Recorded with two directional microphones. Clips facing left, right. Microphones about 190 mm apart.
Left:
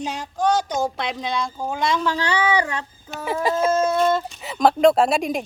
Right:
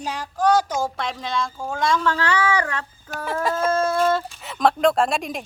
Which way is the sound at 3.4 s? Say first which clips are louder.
Left 2 dB; centre (ahead or behind).